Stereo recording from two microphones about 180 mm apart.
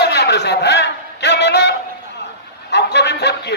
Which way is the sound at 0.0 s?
70° left (ahead or behind).